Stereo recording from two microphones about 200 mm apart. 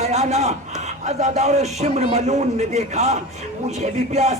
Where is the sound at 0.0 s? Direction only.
35° right (ahead or behind).